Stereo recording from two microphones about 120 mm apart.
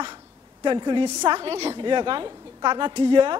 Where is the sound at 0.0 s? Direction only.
45° right (ahead or behind).